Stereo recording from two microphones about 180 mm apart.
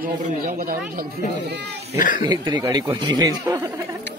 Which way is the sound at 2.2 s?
25° right (ahead or behind).